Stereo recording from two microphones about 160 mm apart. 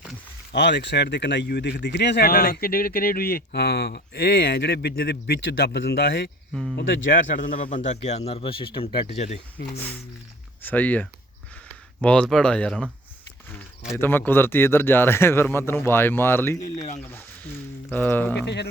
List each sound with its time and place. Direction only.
0.5 s speech: 90° left
6.5 s speech: centre (ahead or behind)
6.7 s speech: 60° left (ahead or behind)
7.9 s speech: 45° left (ahead or behind)
10.6 s speech: 10° left (ahead or behind)
13.9 s speech: 15° left (ahead or behind)
17.1 s a sound: 10° left (ahead or behind)
17.9 s speech: 10° left (ahead or behind)
18.4 s speech: 90° left